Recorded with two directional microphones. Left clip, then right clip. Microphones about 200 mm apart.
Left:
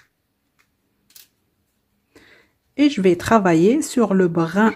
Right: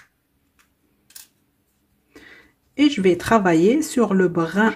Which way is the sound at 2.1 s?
10° left (ahead or behind).